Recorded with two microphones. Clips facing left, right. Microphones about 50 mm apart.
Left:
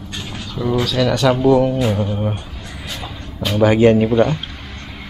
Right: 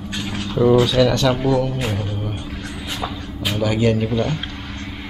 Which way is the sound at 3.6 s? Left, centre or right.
Left.